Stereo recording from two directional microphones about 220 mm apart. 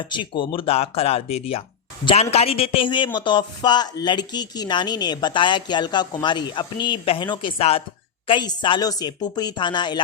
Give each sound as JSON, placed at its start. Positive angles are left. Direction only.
{"t": 0.0, "sound": "a man's voice", "side_deg": 20}